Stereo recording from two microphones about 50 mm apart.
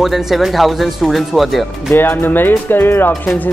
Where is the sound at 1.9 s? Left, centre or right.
Left.